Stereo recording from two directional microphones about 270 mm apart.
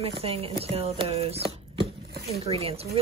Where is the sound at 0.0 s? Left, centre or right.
Right.